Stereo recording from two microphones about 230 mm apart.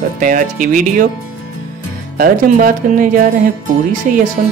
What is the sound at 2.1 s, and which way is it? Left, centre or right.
Speech, right.